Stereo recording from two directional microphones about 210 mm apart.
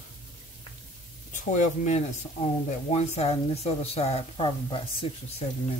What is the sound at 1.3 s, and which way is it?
A woman's voice, 35° left (ahead or behind).